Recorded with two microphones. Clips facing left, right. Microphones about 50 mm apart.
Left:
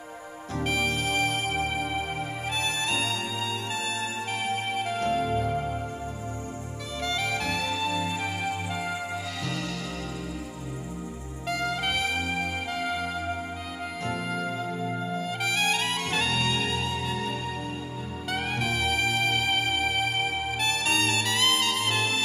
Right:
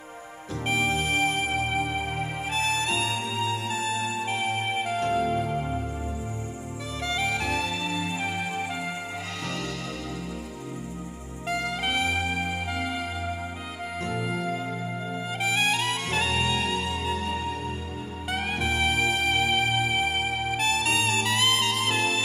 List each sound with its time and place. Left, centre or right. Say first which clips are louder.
0.7 s music: right 2 dB; right
3.6 s music: right 3 dB; centre; by 5.3 s right
5.5 s music: even; right
7.0 s music: right 1 dB; centre
7.2 s music: right 1 dB; right
11.4 s trumpet: even; right
12.1 s music: right 1 dB; right
14.1 s music: right 2 dB; centre
15.8 s music: right 1 dB; right
18.4 s music: right 2 dB; right
20.5 s trumpet: right 2 dB; right
21.5 s music: right 1 dB; right